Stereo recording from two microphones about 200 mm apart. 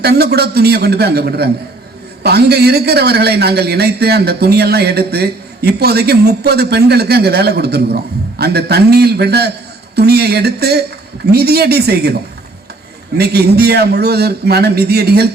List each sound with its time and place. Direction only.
0.0 s a man's voice: 55° right (ahead or behind)
13.1 s a man's voice: 50° right (ahead or behind)